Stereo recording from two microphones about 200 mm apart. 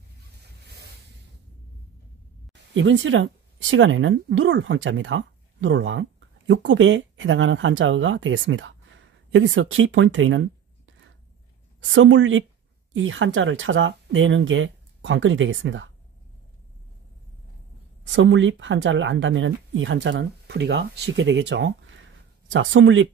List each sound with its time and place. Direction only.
2.7 s speech: 65° right (ahead or behind)
11.8 s speech: 70° right (ahead or behind)
18.1 s speech: 70° right (ahead or behind)